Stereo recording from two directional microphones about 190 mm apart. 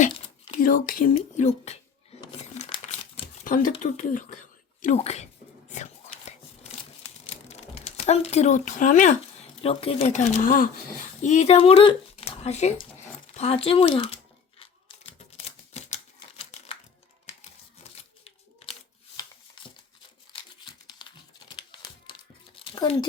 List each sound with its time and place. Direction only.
0.1 s whispering: 35° left (ahead or behind)
0.6 s speech: 45° left (ahead or behind)
2.4 s crumpling: 35° left (ahead or behind)
3.4 s speech: 45° left (ahead or behind)
5.7 s tearing: 35° left (ahead or behind)
7.3 s speech: 35° left (ahead or behind)
16.5 s crumpling: 35° left (ahead or behind)
17.8 s a sound: 35° left (ahead or behind)
21.0 s typing: 25° left (ahead or behind)
22.1 s crumpling: 25° left (ahead or behind)
22.5 s a sound: 25° left (ahead or behind)